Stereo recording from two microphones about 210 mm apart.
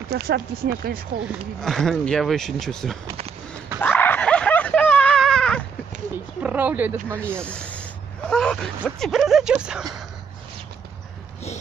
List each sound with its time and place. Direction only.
0.1 s speech: 50° right (ahead or behind)
1.6 s speech: centre (ahead or behind)
3.1 s a sound: 30° right (ahead or behind)
3.8 s a sound: 10° left (ahead or behind)
6.4 s speech: 10° right (ahead or behind)
7.4 s speech: 5° left (ahead or behind)